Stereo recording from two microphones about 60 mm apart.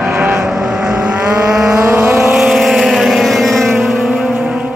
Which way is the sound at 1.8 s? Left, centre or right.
Right.